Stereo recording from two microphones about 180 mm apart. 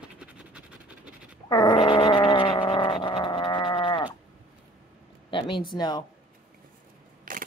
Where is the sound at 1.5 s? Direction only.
25° left (ahead or behind).